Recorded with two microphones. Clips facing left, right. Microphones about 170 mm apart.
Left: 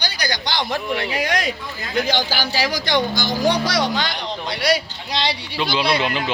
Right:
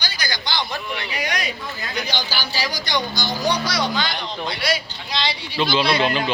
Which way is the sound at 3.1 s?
90° left.